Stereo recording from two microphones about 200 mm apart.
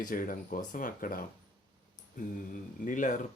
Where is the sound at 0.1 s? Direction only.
45° left (ahead or behind).